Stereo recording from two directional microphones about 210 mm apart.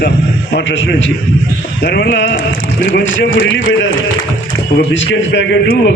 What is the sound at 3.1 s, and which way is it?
A man's voice, 60° left (ahead or behind).